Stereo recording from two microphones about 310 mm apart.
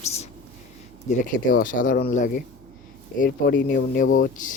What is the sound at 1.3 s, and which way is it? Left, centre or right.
Speech, left.